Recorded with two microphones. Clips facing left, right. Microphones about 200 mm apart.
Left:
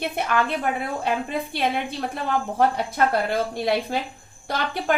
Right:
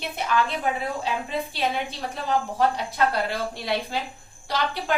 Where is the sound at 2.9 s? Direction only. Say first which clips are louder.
Left 2 dB; 50° left (ahead or behind).